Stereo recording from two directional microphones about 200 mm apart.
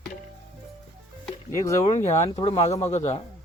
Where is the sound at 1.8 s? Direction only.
35° left (ahead or behind).